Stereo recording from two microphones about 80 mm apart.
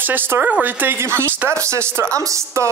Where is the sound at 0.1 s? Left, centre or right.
Right.